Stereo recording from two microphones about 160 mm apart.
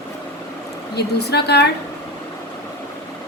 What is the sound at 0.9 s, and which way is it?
Speech, 90° left.